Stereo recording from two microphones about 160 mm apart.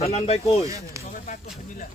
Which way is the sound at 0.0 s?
40° left (ahead or behind).